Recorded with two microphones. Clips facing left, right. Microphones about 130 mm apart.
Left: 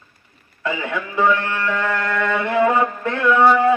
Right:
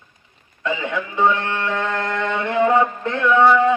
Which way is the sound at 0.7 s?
20° right (ahead or behind).